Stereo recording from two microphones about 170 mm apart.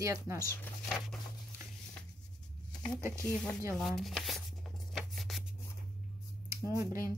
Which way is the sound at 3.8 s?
Centre (ahead or behind).